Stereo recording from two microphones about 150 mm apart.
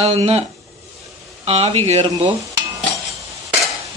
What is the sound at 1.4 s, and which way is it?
Stir, 45° right (ahead or behind).